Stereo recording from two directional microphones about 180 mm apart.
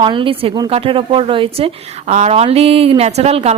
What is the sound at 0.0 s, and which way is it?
A woman's voice, 25° right (ahead or behind).